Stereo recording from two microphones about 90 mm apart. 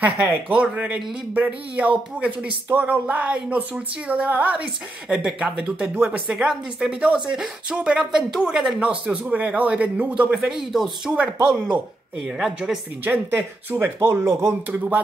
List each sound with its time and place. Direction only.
0.2 s speech: 10° right (ahead or behind)
10.3 s speech: 5° right (ahead or behind)
12.3 s speech: 5° right (ahead or behind)
13.0 s speech: 20° right (ahead or behind)